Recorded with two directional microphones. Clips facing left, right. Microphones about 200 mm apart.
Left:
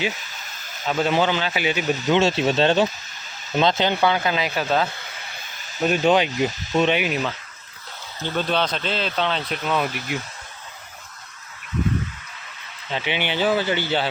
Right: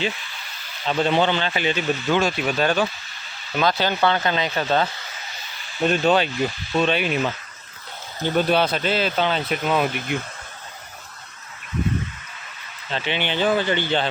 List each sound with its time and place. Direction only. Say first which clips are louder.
0.1 s a sound: even; 45° left (ahead or behind)
0.9 s speech: right 1 dB; 5° left (ahead or behind)
2.0 s speech: left 4 dB; 25° left (ahead or behind)
4.0 s speech: right 3 dB; 5° left (ahead or behind)
7.1 s speech: right 2 dB; 5° right (ahead or behind)
10.1 s speech: right 2 dB; 55° right (ahead or behind)
12.9 s speech: even; 10° left (ahead or behind)